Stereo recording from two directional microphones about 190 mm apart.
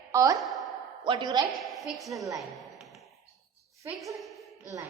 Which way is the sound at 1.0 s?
25° right (ahead or behind).